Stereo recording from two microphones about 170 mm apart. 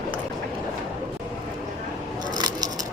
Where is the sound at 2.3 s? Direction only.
25° right (ahead or behind).